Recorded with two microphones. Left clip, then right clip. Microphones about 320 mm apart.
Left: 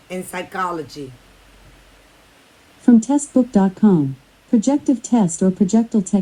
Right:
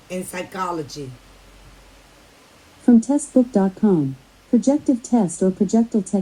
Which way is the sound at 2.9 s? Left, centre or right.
Left.